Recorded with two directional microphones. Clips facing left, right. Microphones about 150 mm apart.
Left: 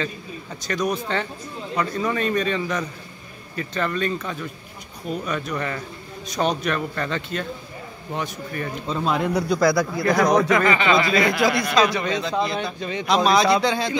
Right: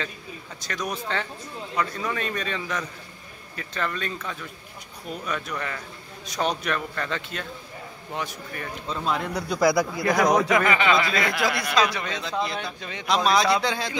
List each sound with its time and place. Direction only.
0.7 s a man's voice: centre (ahead or behind)
9.1 s speech: 10° left (ahead or behind)
9.6 s a man's voice: 15° right (ahead or behind)